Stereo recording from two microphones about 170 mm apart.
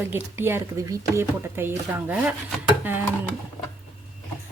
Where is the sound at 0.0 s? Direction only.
15° right (ahead or behind).